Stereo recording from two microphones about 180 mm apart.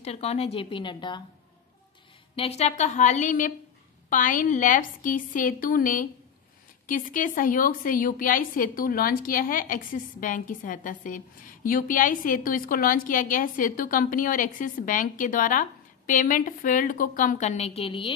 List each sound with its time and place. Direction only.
0.0 s a woman's voice: 35° left (ahead or behind)
2.3 s a woman's voice: 35° left (ahead or behind)